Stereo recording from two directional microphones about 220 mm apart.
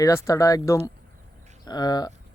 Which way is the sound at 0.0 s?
15° left (ahead or behind).